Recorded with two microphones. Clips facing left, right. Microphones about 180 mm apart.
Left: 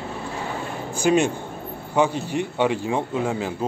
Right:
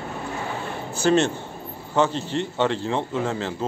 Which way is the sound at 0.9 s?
10° left (ahead or behind).